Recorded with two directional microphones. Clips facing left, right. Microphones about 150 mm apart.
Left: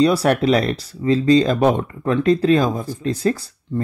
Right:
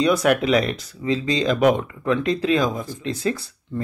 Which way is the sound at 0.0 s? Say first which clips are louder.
Left 3 dB; 35° left (ahead or behind).